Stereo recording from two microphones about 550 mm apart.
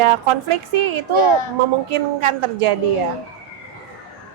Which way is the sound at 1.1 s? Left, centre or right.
Left.